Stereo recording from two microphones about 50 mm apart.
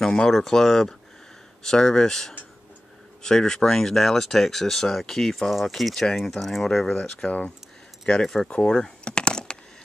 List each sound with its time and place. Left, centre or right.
0.0 s speech: centre
7.2 s speech: left
8.1 s speech: centre
8.5 s keys jangling: centre